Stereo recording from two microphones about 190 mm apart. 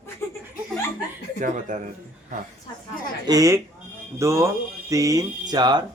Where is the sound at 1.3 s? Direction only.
45° right (ahead or behind).